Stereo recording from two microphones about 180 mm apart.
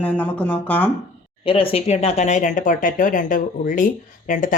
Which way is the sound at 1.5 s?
30° left (ahead or behind).